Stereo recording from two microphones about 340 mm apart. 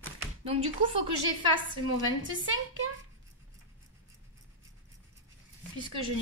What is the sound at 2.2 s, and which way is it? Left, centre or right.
Speech, right.